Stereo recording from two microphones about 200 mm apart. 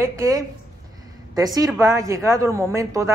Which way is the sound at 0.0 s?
15° right (ahead or behind).